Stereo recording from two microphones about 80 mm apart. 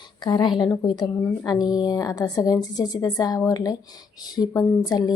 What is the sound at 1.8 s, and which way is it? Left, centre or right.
A woman's voice, left.